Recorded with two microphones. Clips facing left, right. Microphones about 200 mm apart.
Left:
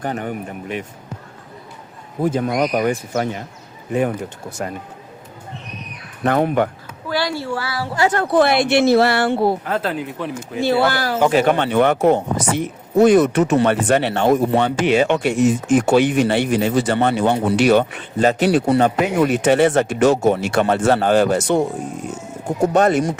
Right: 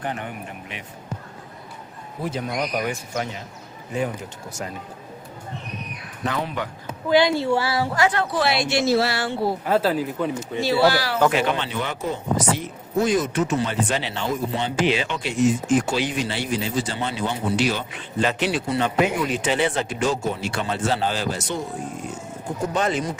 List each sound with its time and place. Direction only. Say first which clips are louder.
0.0 s speech: left 6 dB; 40° left (ahead or behind)
2.2 s speech: left 8 dB; 50° left (ahead or behind)
4.6 s speech: left 6 dB; 55° left (ahead or behind)
6.2 s speech: left 10 dB; 55° left (ahead or behind)
7.1 s speech: right 4 dB; 20° right (ahead or behind)
8.1 s speech: left 7 dB; 50° left (ahead or behind)
9.6 s speech: right 2 dB; 5° right (ahead or behind)
10.6 s speech: left 2 dB; 55° left (ahead or behind)
18.2 s speech: left 7 dB; 45° left (ahead or behind)
18.6 s speech: left 5 dB; 55° left (ahead or behind)
22.7 s speech: left 8 dB; 50° left (ahead or behind)